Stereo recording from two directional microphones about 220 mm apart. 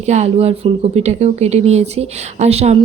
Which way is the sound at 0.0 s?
30° right (ahead or behind).